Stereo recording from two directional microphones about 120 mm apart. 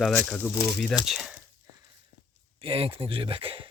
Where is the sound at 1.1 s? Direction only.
5° right (ahead or behind).